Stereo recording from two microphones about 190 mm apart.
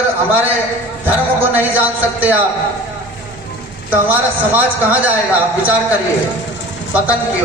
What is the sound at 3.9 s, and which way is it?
A man's voice, 10° right (ahead or behind).